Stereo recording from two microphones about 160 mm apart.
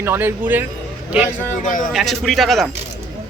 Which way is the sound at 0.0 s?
15° right (ahead or behind).